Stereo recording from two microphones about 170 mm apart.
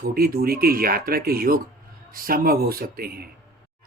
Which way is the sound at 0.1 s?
60° right (ahead or behind).